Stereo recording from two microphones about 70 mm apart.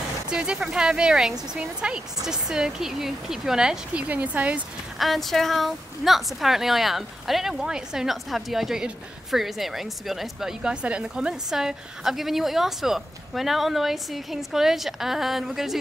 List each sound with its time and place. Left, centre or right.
0.3 s speech: centre
4.9 s speech: centre